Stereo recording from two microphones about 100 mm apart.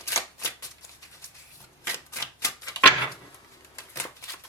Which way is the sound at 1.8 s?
30° left (ahead or behind).